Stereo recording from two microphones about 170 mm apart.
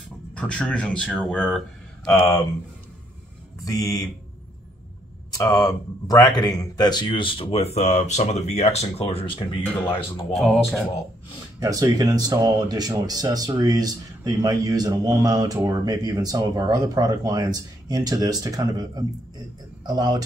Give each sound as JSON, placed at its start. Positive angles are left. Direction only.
{"t": 0.4, "sound": "speech", "side_deg": 5}
{"t": 3.6, "sound": "speech", "side_deg": 20}
{"t": 5.3, "sound": "speech", "side_deg": 25}
{"t": 10.3, "sound": "speech", "side_deg": 0}
{"t": 11.6, "sound": "speech", "side_deg": -20}